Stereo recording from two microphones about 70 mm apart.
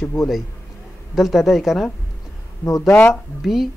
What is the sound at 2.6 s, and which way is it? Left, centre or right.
Speech, left.